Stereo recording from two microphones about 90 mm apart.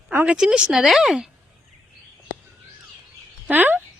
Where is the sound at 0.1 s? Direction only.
20° right (ahead or behind).